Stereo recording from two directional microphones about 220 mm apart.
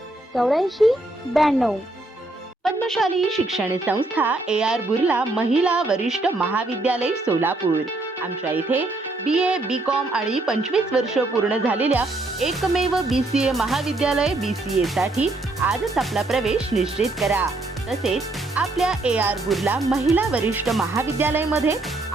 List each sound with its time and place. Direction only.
0.3 s speech: centre (ahead or behind)